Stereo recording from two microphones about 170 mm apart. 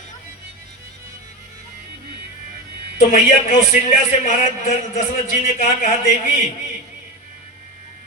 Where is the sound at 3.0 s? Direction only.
50° left (ahead or behind).